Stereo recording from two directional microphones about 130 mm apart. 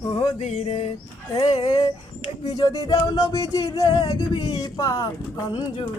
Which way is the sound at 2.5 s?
30° left (ahead or behind).